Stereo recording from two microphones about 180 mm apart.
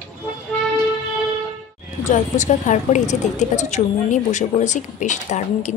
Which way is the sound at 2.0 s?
40° left (ahead or behind).